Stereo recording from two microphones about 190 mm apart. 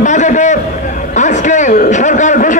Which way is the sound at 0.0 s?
40° left (ahead or behind).